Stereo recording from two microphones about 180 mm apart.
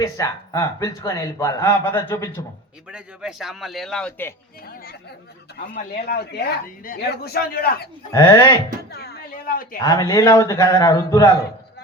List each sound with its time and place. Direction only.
0.0 s a man's voice: 20° left (ahead or behind)
2.9 s a man's voice: 5° right (ahead or behind)
6.0 s speech: 60° left (ahead or behind)
8.1 s speech: 15° left (ahead or behind)
8.9 s a sound: 60° left (ahead or behind)
9.8 s a man's voice: 20° left (ahead or behind)